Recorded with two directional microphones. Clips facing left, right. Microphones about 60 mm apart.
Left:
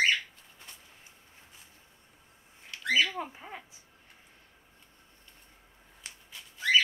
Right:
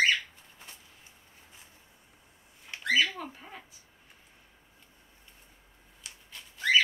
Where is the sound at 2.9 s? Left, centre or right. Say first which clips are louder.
Even; left.